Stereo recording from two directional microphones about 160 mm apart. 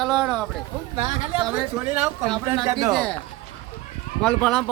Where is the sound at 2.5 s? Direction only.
25° right (ahead or behind).